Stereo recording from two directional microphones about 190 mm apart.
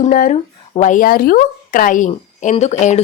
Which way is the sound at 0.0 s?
45° left (ahead or behind).